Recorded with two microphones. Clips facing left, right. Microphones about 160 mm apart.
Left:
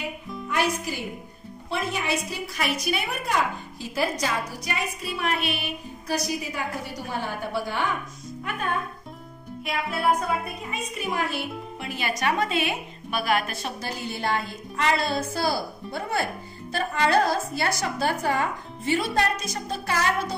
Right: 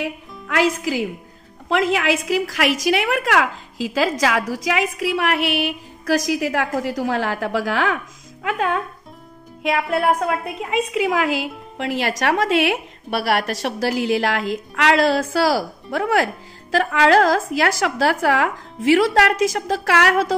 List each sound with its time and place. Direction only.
0.0 s a woman's voice: 90° right